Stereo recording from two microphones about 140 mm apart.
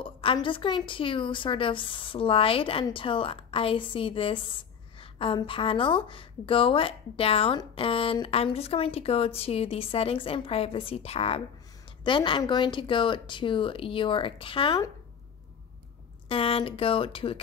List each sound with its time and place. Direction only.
0.0 s a woman's voice: 40° left (ahead or behind)
16.3 s a woman's voice: 40° left (ahead or behind)